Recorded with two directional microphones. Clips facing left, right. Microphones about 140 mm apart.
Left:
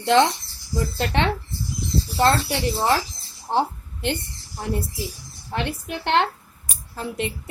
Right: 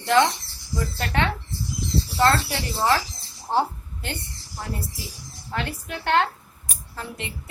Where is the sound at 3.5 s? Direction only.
20° left (ahead or behind).